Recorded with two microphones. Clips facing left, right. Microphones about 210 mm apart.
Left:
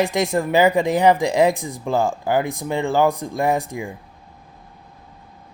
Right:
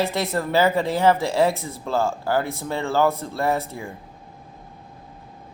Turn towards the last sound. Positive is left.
turn(degrees=15)  # may be behind; listen again after turning